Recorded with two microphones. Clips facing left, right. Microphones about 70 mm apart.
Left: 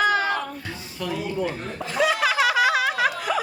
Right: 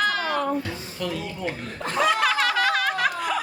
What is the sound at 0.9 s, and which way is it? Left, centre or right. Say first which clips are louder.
Speech: left 1 dB; centre.